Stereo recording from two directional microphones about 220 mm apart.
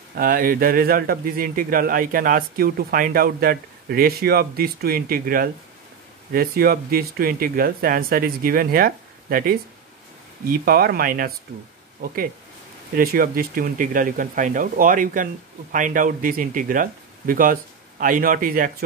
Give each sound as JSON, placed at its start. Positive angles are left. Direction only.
{"t": 0.1, "sound": "a man's voice", "side_deg": -40}
{"t": 12.9, "sound": "a man's voice", "side_deg": -40}